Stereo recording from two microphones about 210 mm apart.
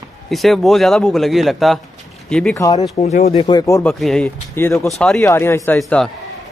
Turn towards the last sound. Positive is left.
turn(degrees=5)  # may be behind; listen again after turning